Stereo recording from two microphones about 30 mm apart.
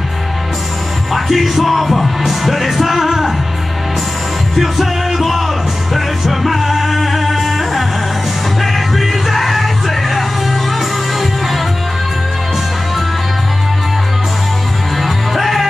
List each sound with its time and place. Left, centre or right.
1.1 s music: centre
4.6 s music: centre
15.0 s music: centre